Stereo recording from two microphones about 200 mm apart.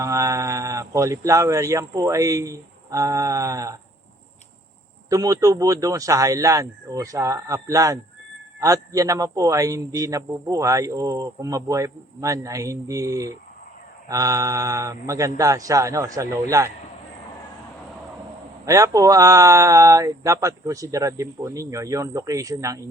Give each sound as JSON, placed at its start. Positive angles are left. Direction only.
{"t": 0.0, "sound": "a man's voice", "side_deg": -15}
{"t": 5.0, "sound": "a man's voice", "side_deg": -15}
{"t": 18.6, "sound": "a man's voice", "side_deg": -15}